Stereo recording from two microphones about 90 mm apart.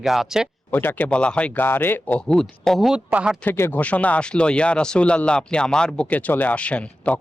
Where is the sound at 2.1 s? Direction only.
10° left (ahead or behind).